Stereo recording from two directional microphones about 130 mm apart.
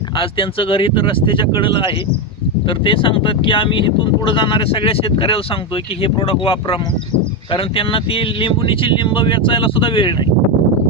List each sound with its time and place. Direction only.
0.2 s speech: 45° left (ahead or behind)